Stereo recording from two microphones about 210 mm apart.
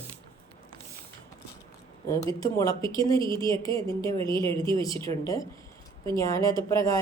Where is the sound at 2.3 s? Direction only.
15° left (ahead or behind).